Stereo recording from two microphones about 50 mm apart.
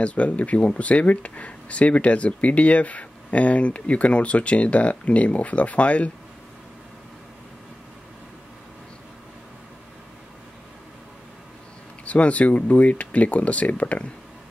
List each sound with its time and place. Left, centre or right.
0.0 s speech: left
12.0 s speech: left